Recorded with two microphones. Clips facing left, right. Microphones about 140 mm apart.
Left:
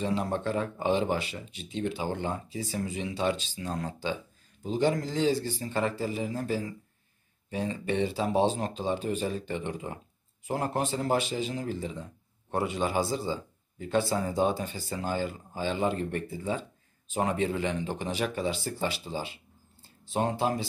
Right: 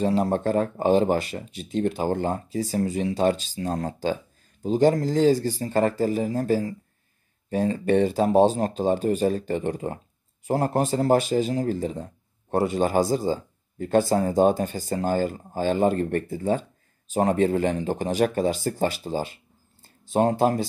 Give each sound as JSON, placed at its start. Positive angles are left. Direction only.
{"t": 0.0, "sound": "a man's voice", "side_deg": -40}